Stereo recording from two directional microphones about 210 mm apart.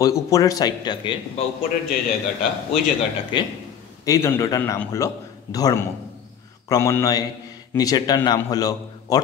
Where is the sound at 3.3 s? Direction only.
25° left (ahead or behind).